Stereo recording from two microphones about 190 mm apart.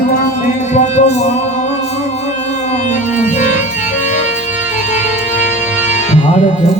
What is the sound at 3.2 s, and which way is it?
Music, 40° left (ahead or behind).